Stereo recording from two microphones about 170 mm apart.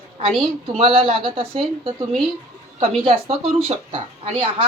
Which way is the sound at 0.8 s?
30° right (ahead or behind).